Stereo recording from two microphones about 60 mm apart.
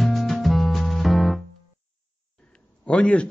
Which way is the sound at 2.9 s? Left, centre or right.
Centre.